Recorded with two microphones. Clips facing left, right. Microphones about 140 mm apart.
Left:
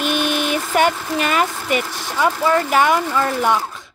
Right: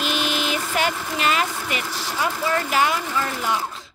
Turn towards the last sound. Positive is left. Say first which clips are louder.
# left 7 dB
turn(degrees=55)  # may be behind; listen again after turning